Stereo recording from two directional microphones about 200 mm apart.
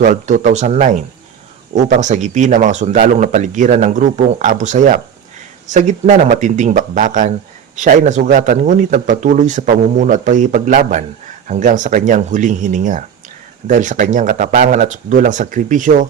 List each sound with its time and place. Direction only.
0.0 s speech: 40° right (ahead or behind)